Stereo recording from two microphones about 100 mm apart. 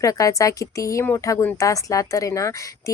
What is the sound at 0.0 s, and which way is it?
Speech, 35° left (ahead or behind).